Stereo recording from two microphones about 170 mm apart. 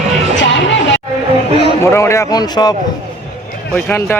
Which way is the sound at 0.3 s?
90° left.